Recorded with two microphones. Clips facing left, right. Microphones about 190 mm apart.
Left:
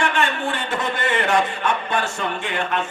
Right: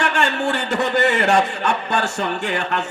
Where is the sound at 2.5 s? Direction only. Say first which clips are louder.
Right 1 dB; 45° right (ahead or behind).